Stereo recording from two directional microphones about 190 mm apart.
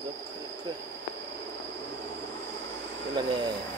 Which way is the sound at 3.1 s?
25° right (ahead or behind).